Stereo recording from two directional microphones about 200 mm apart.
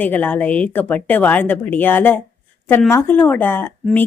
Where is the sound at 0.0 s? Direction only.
10° left (ahead or behind).